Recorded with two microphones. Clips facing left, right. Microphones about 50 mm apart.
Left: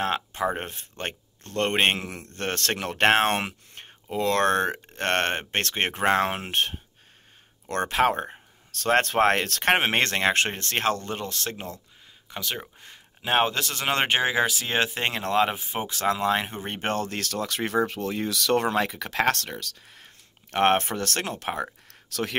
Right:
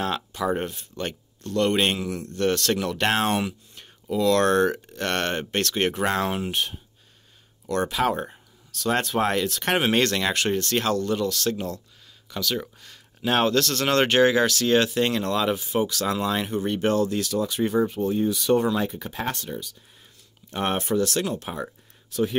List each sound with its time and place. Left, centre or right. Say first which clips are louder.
0.0 s speech: even; left
20.5 s speech: left 2 dB; left
22.1 s speech: right 4 dB; left